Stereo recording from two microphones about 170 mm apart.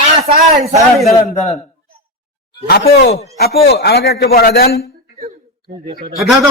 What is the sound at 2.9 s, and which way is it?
A man's voice, 70° left (ahead or behind).